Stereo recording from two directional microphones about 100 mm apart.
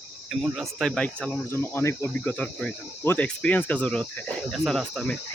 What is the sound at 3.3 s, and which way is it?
Speech, 10° left (ahead or behind).